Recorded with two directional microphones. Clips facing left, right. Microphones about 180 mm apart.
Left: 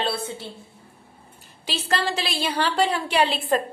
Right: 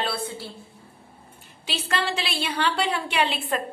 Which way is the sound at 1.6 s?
40° left (ahead or behind).